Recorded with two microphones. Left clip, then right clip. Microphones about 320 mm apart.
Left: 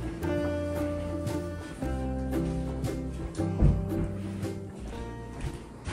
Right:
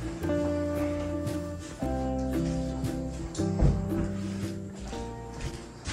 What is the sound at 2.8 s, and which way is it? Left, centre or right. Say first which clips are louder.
Music: right 1 dB; centre.